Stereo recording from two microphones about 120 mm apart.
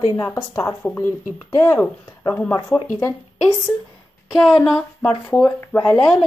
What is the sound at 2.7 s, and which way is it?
Speech, 5° left (ahead or behind).